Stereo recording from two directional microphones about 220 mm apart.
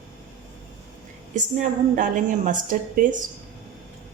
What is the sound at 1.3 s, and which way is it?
A woman's voice, 35° right (ahead or behind).